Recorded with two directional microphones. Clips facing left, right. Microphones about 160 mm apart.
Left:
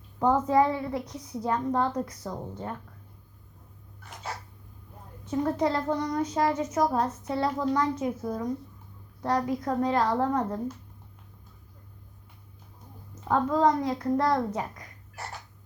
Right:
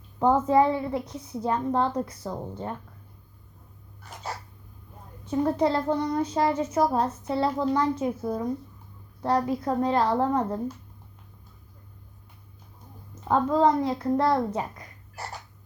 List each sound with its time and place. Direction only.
0.2 s a child's voice: 25° right (ahead or behind)
5.2 s a child's voice: 30° right (ahead or behind)
13.2 s a child's voice: 25° right (ahead or behind)